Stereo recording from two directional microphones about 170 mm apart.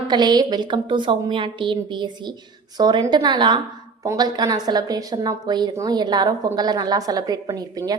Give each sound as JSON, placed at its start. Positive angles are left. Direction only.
{"t": 0.1, "sound": "a woman's voice", "side_deg": -25}